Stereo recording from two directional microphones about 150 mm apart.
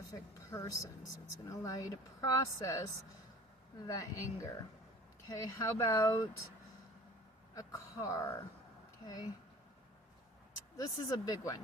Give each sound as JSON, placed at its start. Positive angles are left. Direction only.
{"t": 0.1, "sound": "speech", "side_deg": 20}
{"t": 7.5, "sound": "speech", "side_deg": 20}
{"t": 10.8, "sound": "speech", "side_deg": 25}